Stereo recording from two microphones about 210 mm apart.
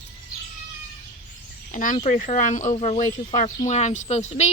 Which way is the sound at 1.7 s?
40° left (ahead or behind).